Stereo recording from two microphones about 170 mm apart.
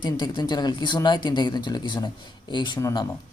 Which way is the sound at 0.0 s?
25° left (ahead or behind).